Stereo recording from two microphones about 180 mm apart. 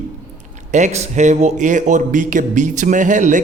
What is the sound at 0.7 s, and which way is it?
A man's voice, 40° right (ahead or behind).